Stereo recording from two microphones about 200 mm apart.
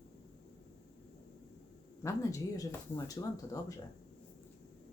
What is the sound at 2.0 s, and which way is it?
Speech, 15° left (ahead or behind).